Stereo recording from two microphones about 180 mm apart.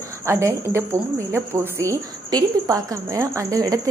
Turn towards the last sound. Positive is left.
turn(degrees=-20)  # may be behind; listen again after turning